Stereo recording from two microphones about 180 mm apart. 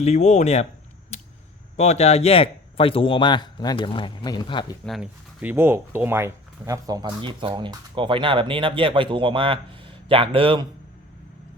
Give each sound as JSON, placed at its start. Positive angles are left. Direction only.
{"t": 0.0, "sound": "speech", "side_deg": 40}
{"t": 1.7, "sound": "speech", "side_deg": 40}
{"t": 4.9, "sound": "speech", "side_deg": -5}